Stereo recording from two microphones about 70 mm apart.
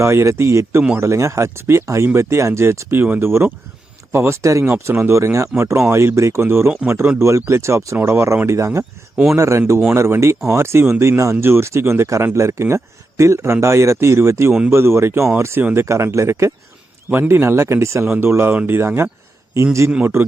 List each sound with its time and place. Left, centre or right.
0.0 s speech: right
4.4 s speech: right
4.7 s speech: right
11.2 s speech: right
17.1 s speech: right